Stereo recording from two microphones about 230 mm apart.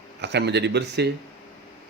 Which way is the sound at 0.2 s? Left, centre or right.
Right.